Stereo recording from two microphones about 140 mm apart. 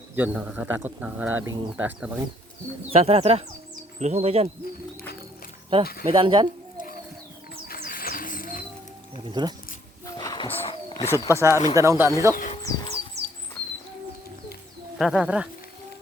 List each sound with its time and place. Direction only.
0.2 s speech: 10° right (ahead or behind)
1.5 s speech: 35° right (ahead or behind)
1.7 s speech: 10° right (ahead or behind)
2.9 s speech: 45° right (ahead or behind)
5.8 s speech: 90° left
6.1 s speech: 35° right (ahead or behind)
7.7 s music: 90° left
9.1 s speech: 30° right (ahead or behind)
10.2 s a sound: 30° left (ahead or behind)
11.3 s speech: 20° right (ahead or behind)
12.6 s a sound: 25° left (ahead or behind)
14.9 s speech: 5° right (ahead or behind)